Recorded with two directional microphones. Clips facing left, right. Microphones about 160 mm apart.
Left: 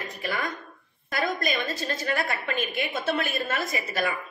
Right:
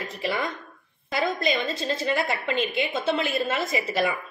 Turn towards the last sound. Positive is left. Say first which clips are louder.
# right 4 dB
turn(degrees=-25)  # may be behind; listen again after turning